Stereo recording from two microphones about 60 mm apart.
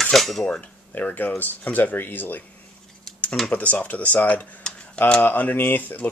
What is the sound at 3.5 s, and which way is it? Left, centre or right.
Speech, left.